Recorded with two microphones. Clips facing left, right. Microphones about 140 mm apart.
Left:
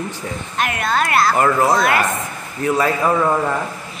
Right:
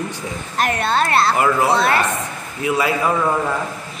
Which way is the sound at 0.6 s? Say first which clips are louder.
Right 1 dB; 35° right (ahead or behind).